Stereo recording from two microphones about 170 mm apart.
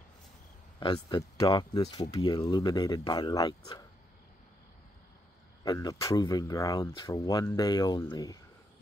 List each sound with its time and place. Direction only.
0.7 s speech: 25° left (ahead or behind)
5.6 s speech: 20° left (ahead or behind)